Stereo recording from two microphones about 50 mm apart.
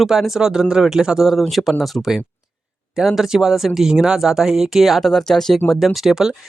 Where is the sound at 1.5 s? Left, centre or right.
Centre.